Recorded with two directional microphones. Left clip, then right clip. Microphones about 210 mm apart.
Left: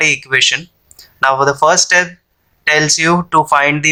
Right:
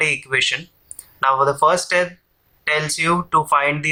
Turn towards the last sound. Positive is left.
turn(degrees=35)  # may be behind; listen again after turning